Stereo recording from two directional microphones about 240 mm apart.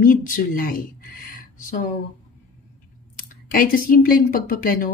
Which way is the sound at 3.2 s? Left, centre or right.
Left.